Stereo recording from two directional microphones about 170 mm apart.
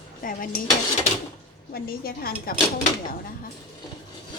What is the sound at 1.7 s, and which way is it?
Speech, 60° left (ahead or behind).